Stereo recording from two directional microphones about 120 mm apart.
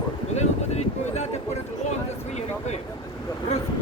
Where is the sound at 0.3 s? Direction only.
65° left (ahead or behind).